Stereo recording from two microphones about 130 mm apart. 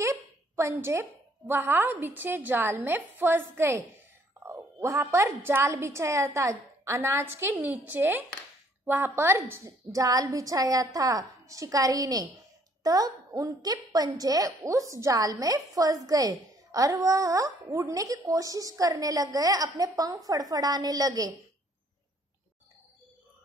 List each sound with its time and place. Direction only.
0.0 s a woman's voice: 20° right (ahead or behind)